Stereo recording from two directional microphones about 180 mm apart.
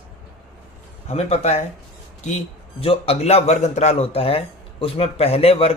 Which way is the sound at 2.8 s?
30° left (ahead or behind).